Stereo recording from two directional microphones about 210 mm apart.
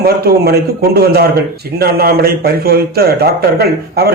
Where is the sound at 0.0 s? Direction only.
45° right (ahead or behind).